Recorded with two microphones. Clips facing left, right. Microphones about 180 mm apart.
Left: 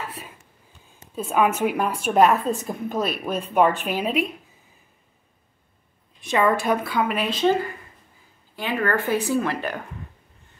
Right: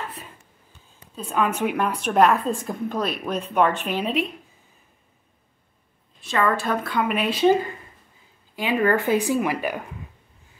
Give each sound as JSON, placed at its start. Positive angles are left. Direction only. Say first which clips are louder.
{"t": 1.1, "sound": "a woman's voice", "louder": "left 3 dB", "side_deg": 10}
{"t": 6.2, "sound": "a woman's voice", "louder": "left 2 dB", "side_deg": 15}
{"t": 8.5, "sound": "a woman's voice", "louder": "right 3 dB", "side_deg": -15}